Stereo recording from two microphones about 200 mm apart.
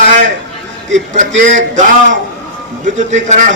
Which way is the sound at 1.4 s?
40° right (ahead or behind).